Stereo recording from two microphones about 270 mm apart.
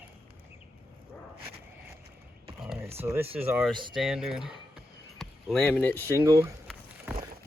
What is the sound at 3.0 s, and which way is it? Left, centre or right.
Speech, centre.